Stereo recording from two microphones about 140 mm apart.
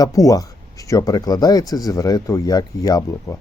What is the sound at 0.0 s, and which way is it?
Speech, 25° left (ahead or behind).